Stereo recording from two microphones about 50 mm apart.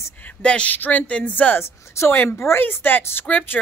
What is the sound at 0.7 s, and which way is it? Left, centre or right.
Speech, left.